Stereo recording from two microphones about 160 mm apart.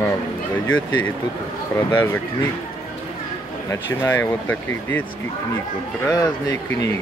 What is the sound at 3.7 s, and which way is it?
Speech, 15° left (ahead or behind).